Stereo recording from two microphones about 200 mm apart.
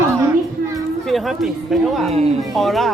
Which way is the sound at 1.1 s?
Centre (ahead or behind).